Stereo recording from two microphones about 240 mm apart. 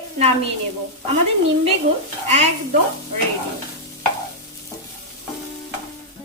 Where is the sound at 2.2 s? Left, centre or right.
Right.